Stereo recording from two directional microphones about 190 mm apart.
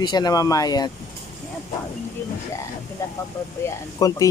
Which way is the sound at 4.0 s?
20° left (ahead or behind).